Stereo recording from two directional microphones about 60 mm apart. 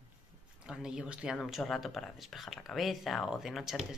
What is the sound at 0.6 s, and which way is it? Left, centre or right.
Speech, centre.